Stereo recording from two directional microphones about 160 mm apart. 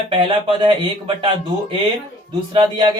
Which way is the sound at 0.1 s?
30° right (ahead or behind).